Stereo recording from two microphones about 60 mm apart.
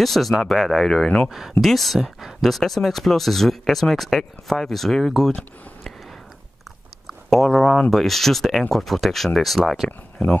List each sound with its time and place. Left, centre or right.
0.0 s speech: centre
1.6 s speech: centre
7.1 s speech: centre